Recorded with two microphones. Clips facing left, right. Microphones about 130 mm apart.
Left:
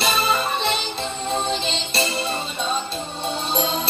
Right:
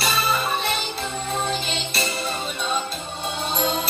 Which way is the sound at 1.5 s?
30° left (ahead or behind).